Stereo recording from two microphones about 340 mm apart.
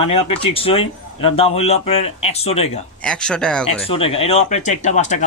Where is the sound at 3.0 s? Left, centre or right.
Centre.